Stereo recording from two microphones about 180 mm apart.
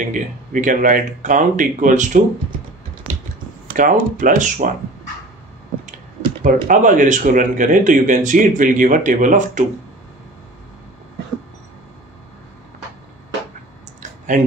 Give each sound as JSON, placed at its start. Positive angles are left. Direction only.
{"t": 0.0, "sound": "speech", "side_deg": -45}
{"t": 3.6, "sound": "speech", "side_deg": -50}
{"t": 6.4, "sound": "speech", "side_deg": -45}